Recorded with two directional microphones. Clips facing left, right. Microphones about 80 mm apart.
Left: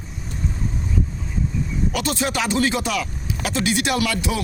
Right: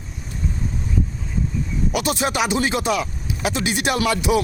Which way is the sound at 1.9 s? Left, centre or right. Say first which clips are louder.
Right 3 dB; centre.